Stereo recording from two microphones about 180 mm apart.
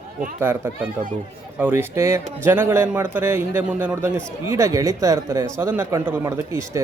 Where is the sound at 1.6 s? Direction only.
10° right (ahead or behind).